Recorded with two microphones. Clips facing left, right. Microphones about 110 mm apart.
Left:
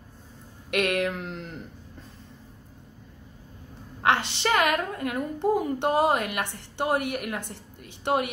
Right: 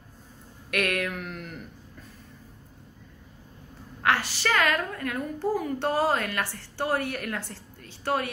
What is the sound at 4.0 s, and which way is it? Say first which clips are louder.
A woman's voice: left 2 dB; 25° left (ahead or behind).